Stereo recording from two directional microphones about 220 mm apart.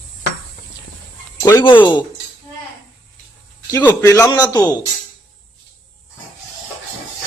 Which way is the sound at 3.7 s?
10° left (ahead or behind).